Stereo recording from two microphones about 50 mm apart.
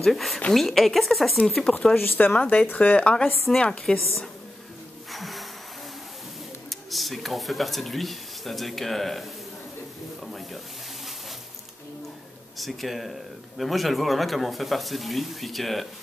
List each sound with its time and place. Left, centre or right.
0.0 s speech: centre
1.5 s speech: centre
2.0 s speech: left
2.3 s speech: left
3.5 s speech: centre
3.9 s speech: centre
5.1 s music: centre
6.7 s speech: centre
10.2 s a sound: centre
12.5 s speech: centre